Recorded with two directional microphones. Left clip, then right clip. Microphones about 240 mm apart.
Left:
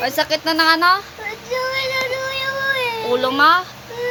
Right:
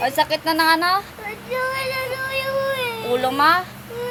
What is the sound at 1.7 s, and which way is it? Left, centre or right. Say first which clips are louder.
Child singing: left 4 dB; centre.